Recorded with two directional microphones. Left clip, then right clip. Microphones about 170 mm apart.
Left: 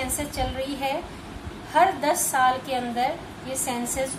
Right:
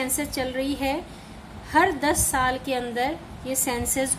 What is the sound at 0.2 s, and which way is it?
A woman's voice, 50° right (ahead or behind).